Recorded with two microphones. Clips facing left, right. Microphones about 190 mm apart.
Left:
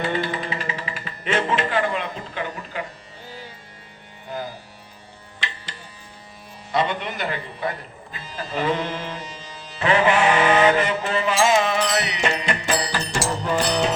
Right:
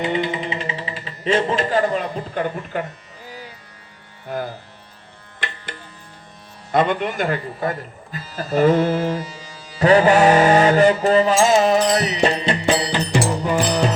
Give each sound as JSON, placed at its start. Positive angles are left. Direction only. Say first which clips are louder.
{"t": 0.0, "sound": "music", "louder": "right 3 dB", "side_deg": -20}
{"t": 5.4, "sound": "a sound", "louder": "right 3 dB", "side_deg": -55}
{"t": 6.7, "sound": "speech", "louder": "right 5 dB", "side_deg": -50}
{"t": 8.5, "sound": "mantra", "louder": "right 9 dB", "side_deg": -45}
{"t": 9.1, "sound": "music", "louder": "right 6 dB", "side_deg": -5}
{"t": 9.8, "sound": "music", "louder": "right 6 dB", "side_deg": -40}
{"t": 13.2, "sound": "music", "louder": "right 3 dB", "side_deg": -15}